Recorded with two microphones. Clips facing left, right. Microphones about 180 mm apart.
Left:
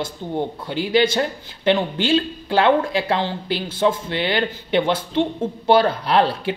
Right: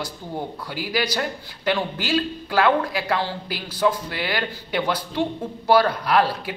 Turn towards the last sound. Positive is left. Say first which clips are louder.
# left 2 dB
turn(degrees=25)  # may be behind; listen again after turning